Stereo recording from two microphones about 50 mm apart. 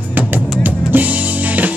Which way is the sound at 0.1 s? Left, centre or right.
Right.